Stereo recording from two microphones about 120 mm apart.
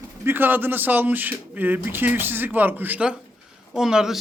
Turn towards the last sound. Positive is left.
turn(degrees=-5)  # may be behind; listen again after turning